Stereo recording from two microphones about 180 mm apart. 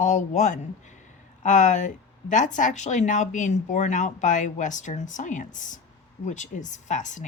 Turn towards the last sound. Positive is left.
turn(degrees=45)  # may be behind; listen again after turning